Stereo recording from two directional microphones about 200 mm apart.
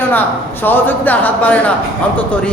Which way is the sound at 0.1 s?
10° left (ahead or behind).